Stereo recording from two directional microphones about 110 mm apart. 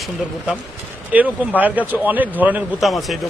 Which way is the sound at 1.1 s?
15° right (ahead or behind).